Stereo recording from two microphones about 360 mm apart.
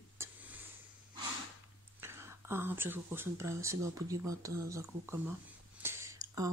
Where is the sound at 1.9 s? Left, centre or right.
Centre.